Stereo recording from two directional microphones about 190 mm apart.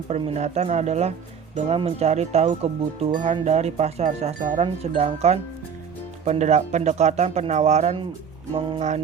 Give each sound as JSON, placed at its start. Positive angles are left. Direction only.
{"t": 0.1, "sound": "chime", "side_deg": -35}